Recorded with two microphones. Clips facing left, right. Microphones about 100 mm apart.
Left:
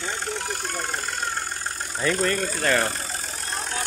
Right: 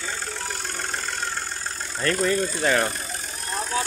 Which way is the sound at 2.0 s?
5° left (ahead or behind).